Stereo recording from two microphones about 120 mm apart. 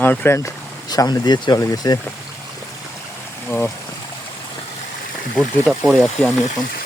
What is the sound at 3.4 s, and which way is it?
Speech, 15° left (ahead or behind).